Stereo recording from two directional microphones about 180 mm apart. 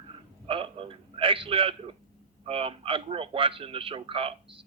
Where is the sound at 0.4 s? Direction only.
30° right (ahead or behind).